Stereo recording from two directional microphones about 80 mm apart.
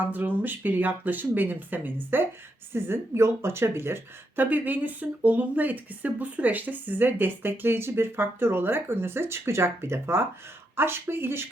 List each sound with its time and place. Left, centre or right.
0.0 s speech: right